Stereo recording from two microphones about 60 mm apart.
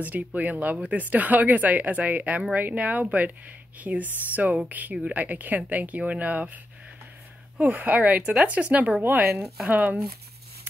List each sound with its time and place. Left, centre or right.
0.0 s speech: right
4.9 s a woman's voice: centre
5.2 s speech: right
7.7 s speech: right